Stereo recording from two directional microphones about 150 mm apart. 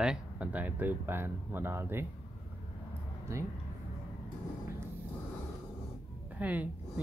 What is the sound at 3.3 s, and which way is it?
Speech, 20° right (ahead or behind).